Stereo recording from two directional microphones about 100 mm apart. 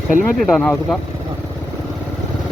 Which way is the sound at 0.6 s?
15° left (ahead or behind).